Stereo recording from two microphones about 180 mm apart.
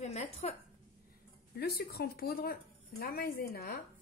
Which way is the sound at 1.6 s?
60° left (ahead or behind).